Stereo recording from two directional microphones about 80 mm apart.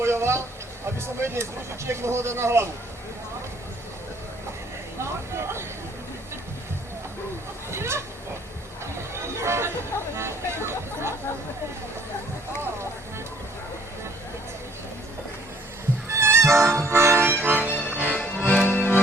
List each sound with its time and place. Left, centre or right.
0.0 s vehicle: right
0.9 s speech: right
4.9 s speech: right
7.7 s speech: right
9.1 s a sound: right
10.2 s hubbub: right
16.1 s music: right
18.0 s accordion: left